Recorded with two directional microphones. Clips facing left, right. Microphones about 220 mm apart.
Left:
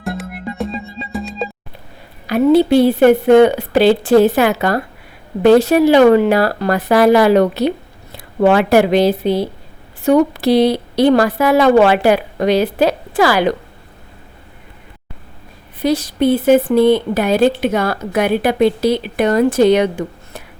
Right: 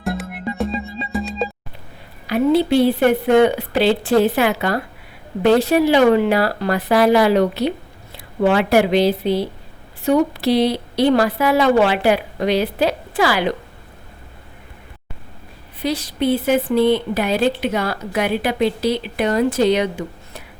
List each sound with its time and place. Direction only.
0.0 s music: centre (ahead or behind)
2.3 s a woman's voice: 45° left (ahead or behind)
15.8 s a woman's voice: 45° left (ahead or behind)